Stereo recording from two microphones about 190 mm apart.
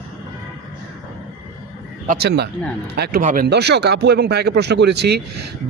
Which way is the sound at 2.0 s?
60° right (ahead or behind).